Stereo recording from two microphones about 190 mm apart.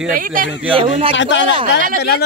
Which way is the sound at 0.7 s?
30° right (ahead or behind).